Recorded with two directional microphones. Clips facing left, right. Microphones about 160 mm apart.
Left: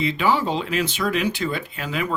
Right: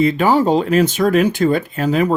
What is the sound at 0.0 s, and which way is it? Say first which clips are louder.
Speech: right 7 dB; 45° right (ahead or behind).